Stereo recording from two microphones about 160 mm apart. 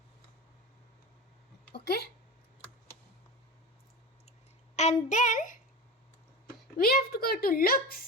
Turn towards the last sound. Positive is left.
turn(degrees=65)  # may be behind; listen again after turning